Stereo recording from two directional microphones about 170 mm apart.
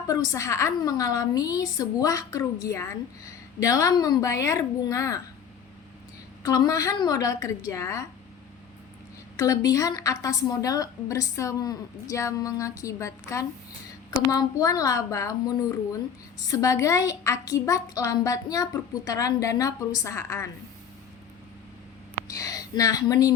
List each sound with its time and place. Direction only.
0.1 s a woman's voice: 20° left (ahead or behind)
6.4 s a woman's voice: 20° left (ahead or behind)
9.4 s a woman's voice: 20° left (ahead or behind)
22.4 s a woman's voice: 20° left (ahead or behind)